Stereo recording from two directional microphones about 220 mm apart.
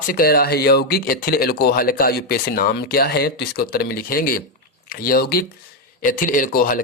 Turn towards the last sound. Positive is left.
turn(degrees=40)  # may be behind; listen again after turning